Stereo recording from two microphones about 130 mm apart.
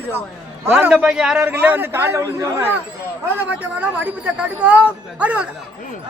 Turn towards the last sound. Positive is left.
turn(degrees=-10)  # may be behind; listen again after turning